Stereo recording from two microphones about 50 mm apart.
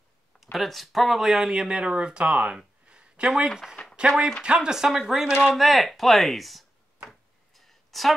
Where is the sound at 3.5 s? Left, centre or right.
Centre.